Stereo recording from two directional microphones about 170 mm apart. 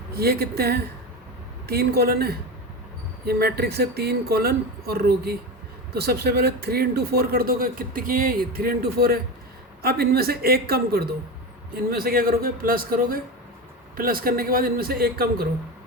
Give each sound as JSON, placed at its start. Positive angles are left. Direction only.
{"t": 0.1, "sound": "speech", "side_deg": -65}